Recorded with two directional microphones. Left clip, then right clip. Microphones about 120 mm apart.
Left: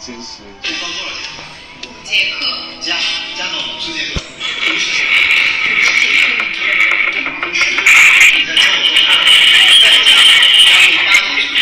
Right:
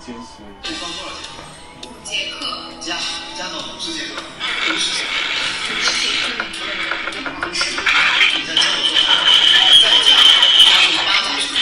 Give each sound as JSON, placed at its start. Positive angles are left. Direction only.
{"t": 0.7, "sound": "a woman's voice", "side_deg": -30}
{"t": 2.9, "sound": "music", "side_deg": -30}
{"t": 7.9, "sound": "music", "side_deg": -45}
{"t": 11.1, "sound": "music", "side_deg": -35}